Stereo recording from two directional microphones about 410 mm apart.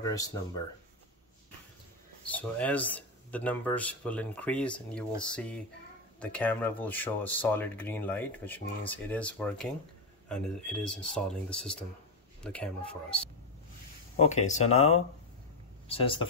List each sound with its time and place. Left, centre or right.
0.0 s speech: centre
2.3 s speech: centre
14.1 s speech: centre